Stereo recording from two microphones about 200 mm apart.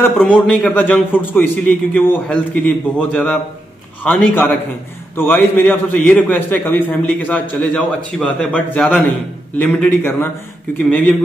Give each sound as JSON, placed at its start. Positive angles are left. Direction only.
{"t": 0.0, "sound": "a man's voice", "side_deg": 5}